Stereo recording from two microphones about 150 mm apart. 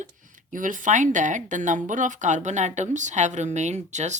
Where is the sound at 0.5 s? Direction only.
60° right (ahead or behind).